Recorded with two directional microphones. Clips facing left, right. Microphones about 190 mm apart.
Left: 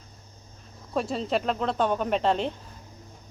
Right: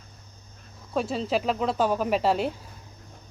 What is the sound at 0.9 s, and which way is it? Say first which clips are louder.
A woman's voice: right 1 dB; centre (ahead or behind).